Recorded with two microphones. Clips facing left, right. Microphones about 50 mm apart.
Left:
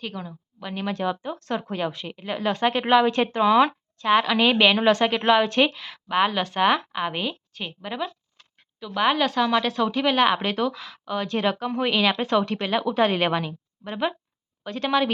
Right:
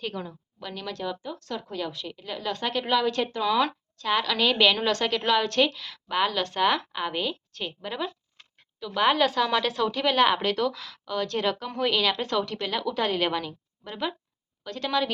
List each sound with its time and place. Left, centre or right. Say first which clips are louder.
0.0 s a woman's voice: even; centre
0.6 s a woman's voice: left 6 dB; left